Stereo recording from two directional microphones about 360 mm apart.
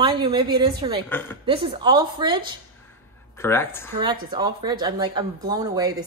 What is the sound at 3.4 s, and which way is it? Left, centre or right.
Speech, centre.